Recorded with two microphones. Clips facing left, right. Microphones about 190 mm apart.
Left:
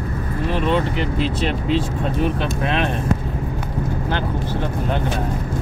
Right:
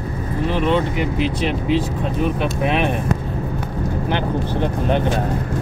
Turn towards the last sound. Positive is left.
turn(degrees=-20)  # may be behind; listen again after turning